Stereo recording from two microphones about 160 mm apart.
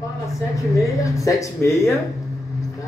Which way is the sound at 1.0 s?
20° left (ahead or behind).